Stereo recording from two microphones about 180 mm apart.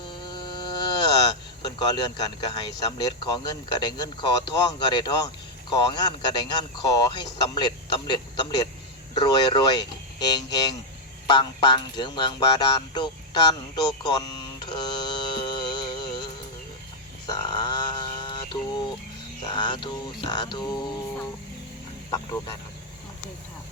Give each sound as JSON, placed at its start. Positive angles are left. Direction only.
{"t": 0.1, "sound": "speech", "side_deg": 25}
{"t": 17.2, "sound": "a sound", "side_deg": 20}
{"t": 19.5, "sound": "speech", "side_deg": 25}